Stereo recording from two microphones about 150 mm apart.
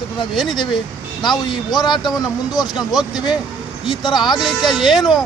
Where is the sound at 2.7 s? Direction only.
Centre (ahead or behind).